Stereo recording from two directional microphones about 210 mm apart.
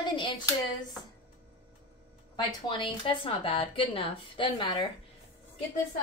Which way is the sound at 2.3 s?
25° left (ahead or behind).